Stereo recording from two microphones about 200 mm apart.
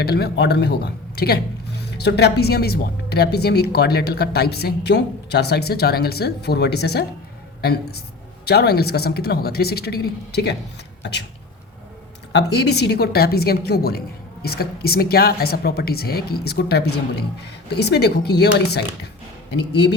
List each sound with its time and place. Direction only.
0.0 s speech: 50° left (ahead or behind)
12.3 s speech: 55° left (ahead or behind)